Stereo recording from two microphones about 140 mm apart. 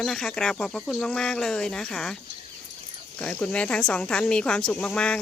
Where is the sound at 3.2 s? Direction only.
10° left (ahead or behind).